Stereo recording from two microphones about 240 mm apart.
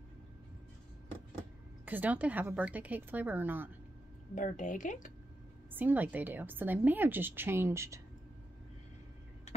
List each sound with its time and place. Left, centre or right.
1.9 s a woman's voice: centre
4.4 s speech: left
5.7 s a woman's voice: centre